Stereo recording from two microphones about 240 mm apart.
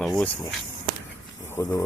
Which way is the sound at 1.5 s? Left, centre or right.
Centre.